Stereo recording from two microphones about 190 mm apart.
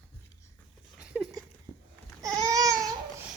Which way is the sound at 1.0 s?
5° right (ahead or behind).